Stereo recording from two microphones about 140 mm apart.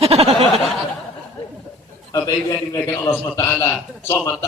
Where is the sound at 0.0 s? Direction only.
45° right (ahead or behind).